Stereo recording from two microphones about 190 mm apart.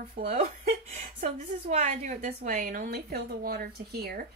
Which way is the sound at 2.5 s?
50° right (ahead or behind).